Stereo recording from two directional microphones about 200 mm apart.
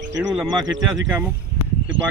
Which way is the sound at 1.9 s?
70° right (ahead or behind).